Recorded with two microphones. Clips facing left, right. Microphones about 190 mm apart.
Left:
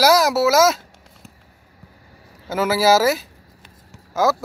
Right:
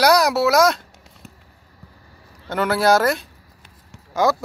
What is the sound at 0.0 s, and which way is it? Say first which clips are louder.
Speech: left 1 dB; centre (ahead or behind).